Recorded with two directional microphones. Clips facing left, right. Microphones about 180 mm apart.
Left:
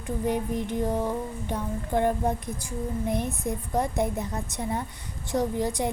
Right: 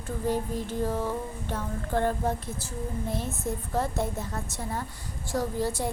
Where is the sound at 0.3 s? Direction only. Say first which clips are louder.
Left 1 dB; 20° left (ahead or behind).